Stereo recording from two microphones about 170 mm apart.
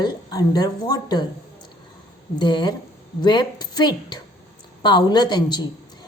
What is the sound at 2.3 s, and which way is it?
A woman's voice, 25° left (ahead or behind).